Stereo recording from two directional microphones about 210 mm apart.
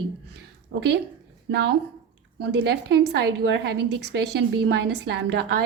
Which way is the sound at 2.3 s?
55° right (ahead or behind).